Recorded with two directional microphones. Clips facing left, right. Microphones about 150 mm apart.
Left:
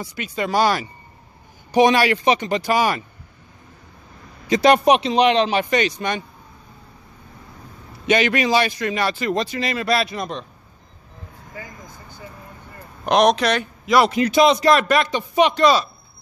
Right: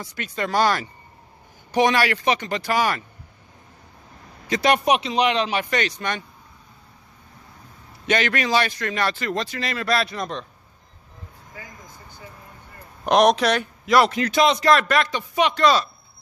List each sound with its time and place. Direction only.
0.0 s a man's voice: 5° left (ahead or behind)
4.5 s a man's voice: 30° left (ahead or behind)
5.7 s a man's voice: 15° left (ahead or behind)
8.1 s a man's voice: 15° left (ahead or behind)
13.0 s a man's voice: 5° right (ahead or behind)